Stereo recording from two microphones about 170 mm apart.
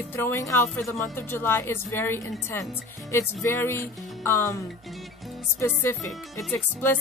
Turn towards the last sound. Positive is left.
turn(degrees=10)  # may be behind; listen again after turning